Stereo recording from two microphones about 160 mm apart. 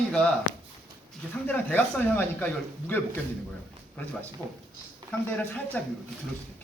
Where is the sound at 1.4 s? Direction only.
10° left (ahead or behind).